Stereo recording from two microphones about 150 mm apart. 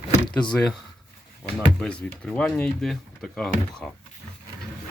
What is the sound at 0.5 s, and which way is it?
Speech, centre (ahead or behind).